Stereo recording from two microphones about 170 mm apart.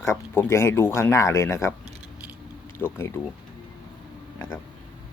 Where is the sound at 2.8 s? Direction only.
15° left (ahead or behind).